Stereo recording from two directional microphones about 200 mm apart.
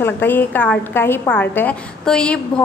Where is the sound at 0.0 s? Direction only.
10° left (ahead or behind).